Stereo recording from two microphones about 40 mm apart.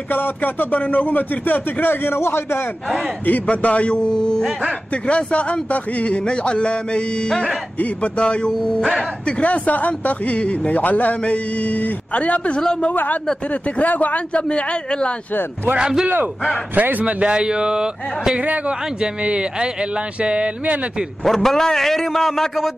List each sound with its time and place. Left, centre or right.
0.1 s speech: left
3.3 s a man's voice: left; by 4.5 s centre
4.9 s a man's voice: left
12.9 s speech: left
13.5 s speech: left
14.3 s a man's voice: left
16.7 s a man's voice: right
17.0 s speech: right
21.2 s a man's voice: centre